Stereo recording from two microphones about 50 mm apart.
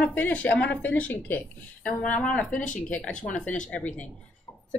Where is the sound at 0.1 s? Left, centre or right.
Left.